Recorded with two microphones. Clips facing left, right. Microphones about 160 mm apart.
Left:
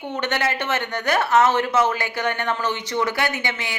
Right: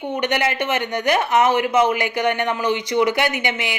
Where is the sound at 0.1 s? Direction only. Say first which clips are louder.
Right 3 dB; 15° right (ahead or behind).